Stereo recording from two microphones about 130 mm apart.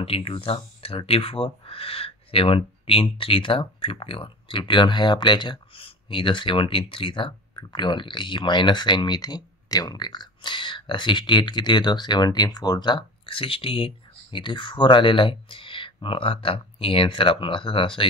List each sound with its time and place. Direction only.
0.0 s speech: 45° left (ahead or behind)